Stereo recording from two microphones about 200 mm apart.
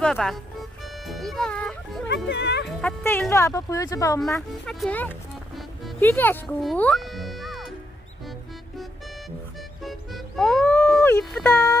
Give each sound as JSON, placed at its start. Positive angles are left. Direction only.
{"t": 0.0, "sound": "speech", "side_deg": 5}
{"t": 2.0, "sound": "speech", "side_deg": 60}
{"t": 2.6, "sound": "speech", "side_deg": 10}
{"t": 4.4, "sound": "speech", "side_deg": 0}
{"t": 9.8, "sound": "music", "side_deg": 0}